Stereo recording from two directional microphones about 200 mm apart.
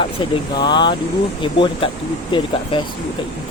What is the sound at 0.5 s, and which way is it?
Speech, 20° left (ahead or behind).